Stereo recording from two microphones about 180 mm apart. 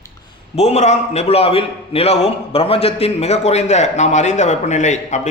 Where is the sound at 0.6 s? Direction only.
35° left (ahead or behind).